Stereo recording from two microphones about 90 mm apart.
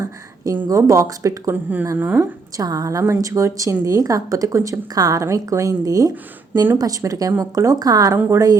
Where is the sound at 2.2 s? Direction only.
45° right (ahead or behind).